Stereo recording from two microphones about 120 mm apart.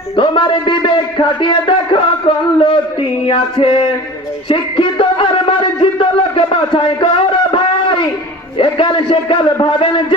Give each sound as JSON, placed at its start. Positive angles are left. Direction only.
{"t": 0.2, "sound": "a man's voice", "side_deg": 40}